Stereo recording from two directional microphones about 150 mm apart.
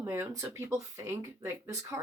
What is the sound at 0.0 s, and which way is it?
Speech, 15° right (ahead or behind).